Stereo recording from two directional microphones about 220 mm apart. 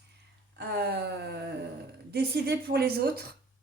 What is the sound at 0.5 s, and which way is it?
Speech, 50° right (ahead or behind).